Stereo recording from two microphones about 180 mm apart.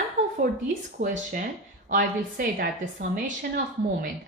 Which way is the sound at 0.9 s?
45° right (ahead or behind).